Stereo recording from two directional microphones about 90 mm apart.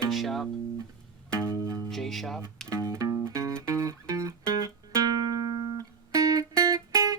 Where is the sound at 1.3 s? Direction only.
35° right (ahead or behind).